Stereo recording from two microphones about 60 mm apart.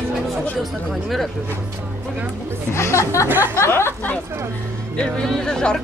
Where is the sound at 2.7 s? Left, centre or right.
Left.